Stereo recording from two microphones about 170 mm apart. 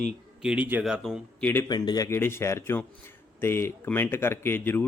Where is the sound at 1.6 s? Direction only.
25° left (ahead or behind).